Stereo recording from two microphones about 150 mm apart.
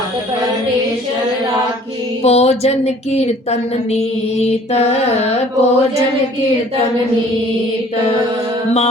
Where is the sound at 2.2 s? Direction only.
45° left (ahead or behind).